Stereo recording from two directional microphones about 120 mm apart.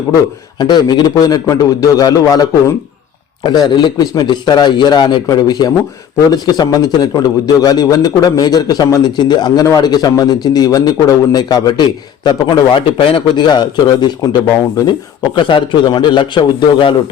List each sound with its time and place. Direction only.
0.6 s a man's voice: 35° left (ahead or behind)
15.4 s a man's voice: 45° left (ahead or behind)